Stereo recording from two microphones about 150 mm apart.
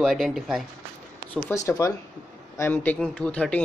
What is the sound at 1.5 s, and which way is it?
A man's voice, 20° left (ahead or behind).